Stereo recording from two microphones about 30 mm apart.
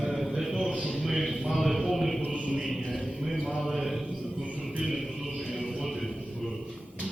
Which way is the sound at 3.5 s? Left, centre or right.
Centre.